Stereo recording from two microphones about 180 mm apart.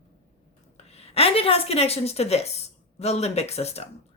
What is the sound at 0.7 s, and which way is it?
A woman's voice, 35° left (ahead or behind).